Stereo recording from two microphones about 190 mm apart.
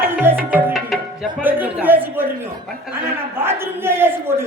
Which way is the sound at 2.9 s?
10° right (ahead or behind).